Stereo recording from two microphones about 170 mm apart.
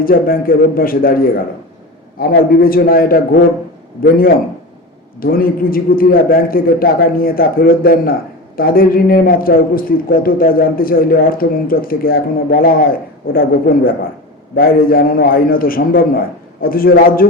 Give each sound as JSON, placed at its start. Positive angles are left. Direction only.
{"t": 0.0, "sound": "a man's voice", "side_deg": 60}